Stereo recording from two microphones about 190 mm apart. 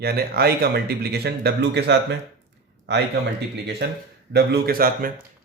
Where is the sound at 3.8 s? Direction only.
60° right (ahead or behind).